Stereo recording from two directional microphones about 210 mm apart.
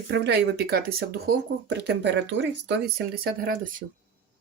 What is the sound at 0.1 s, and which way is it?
Speech, 50° right (ahead or behind).